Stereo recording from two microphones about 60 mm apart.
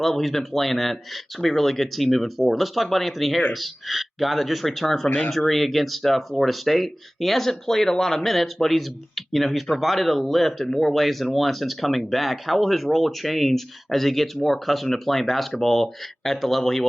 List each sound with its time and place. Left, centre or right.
0.0 s speech: centre
5.0 s speech: left
5.5 s speech: centre